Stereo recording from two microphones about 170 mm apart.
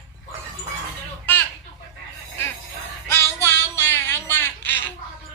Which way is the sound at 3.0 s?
15° left (ahead or behind).